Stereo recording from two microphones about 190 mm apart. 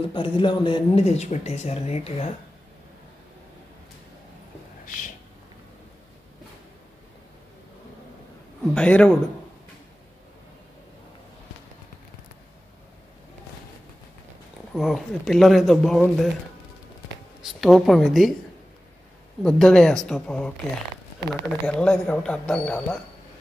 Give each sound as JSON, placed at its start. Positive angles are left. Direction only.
{"t": 0.1, "sound": "speech", "side_deg": 25}
{"t": 4.8, "sound": "a sound", "side_deg": 45}
{"t": 8.7, "sound": "speech", "side_deg": 5}
{"t": 14.8, "sound": "speech", "side_deg": 0}
{"t": 17.4, "sound": "a woman's voice", "side_deg": 0}
{"t": 19.4, "sound": "speech", "side_deg": 5}
{"t": 21.6, "sound": "speech", "side_deg": 5}